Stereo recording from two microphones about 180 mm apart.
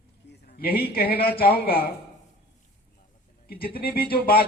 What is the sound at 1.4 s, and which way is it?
Speech, 55° left (ahead or behind).